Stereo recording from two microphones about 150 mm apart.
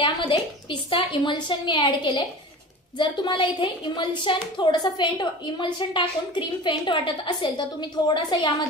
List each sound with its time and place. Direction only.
0.0 s a woman's voice: 35° left (ahead or behind)